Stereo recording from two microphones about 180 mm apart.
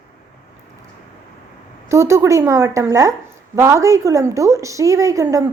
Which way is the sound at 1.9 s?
15° right (ahead or behind).